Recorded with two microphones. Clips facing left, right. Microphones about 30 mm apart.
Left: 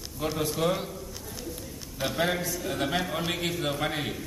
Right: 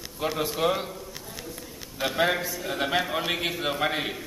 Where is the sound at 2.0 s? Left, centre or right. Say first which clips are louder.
Right 3 dB; right.